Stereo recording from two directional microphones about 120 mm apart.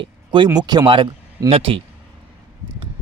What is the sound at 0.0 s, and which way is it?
Speech, 40° right (ahead or behind).